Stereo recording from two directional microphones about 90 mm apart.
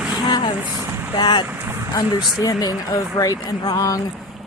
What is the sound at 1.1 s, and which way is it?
Speech, 55° left (ahead or behind).